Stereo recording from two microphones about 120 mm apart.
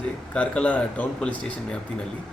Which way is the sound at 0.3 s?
10° left (ahead or behind).